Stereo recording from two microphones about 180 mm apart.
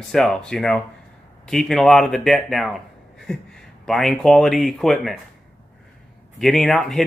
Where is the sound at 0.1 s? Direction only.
5° left (ahead or behind).